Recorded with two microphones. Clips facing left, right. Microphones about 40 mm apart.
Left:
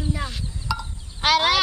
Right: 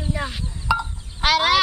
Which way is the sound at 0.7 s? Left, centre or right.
Right.